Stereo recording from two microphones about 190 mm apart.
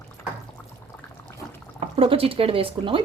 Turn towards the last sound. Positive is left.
turn(degrees=-25)  # may be behind; listen again after turning